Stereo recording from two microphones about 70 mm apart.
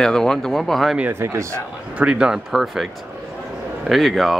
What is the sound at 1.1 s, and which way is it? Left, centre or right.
Speech, right.